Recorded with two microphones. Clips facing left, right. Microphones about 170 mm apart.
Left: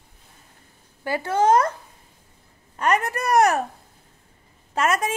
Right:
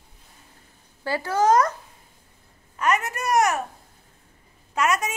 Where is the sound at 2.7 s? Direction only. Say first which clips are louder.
Left 2 dB; 35° left (ahead or behind).